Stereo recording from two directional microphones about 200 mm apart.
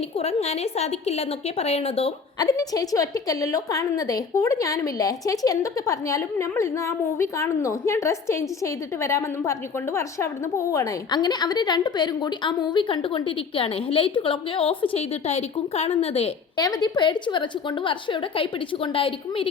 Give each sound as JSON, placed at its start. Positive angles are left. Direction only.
{"t": 0.2, "sound": "a woman's voice", "side_deg": 30}
{"t": 2.4, "sound": "a woman's voice", "side_deg": 15}